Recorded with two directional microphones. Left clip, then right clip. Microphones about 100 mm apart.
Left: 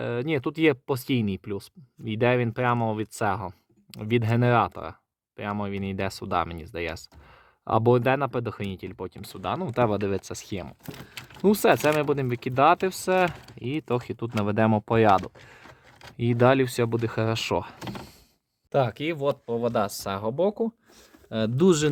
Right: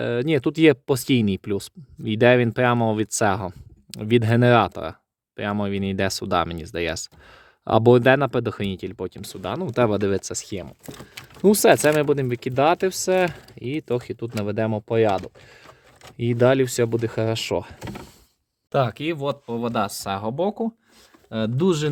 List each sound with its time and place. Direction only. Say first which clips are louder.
0.0 s speech: right 6 dB; 25° right (ahead or behind)
9.4 s speech: right 1 dB; centre (ahead or behind)
9.7 s speech: right 5 dB; 15° right (ahead or behind)
10.2 s speech: right 5 dB; centre (ahead or behind)
11.4 s speech: right 5 dB; 5° right (ahead or behind); by 14.7 s 20° left (ahead or behind)
14.7 s speech: even; 35° left (ahead or behind)
16.1 s speech: right 2 dB; 10° left (ahead or behind)
16.6 s speech: right 4 dB; centre (ahead or behind)
18.9 s speech: right 1 dB; 15° left (ahead or behind)
21.5 s speech: left 1 dB; 25° left (ahead or behind)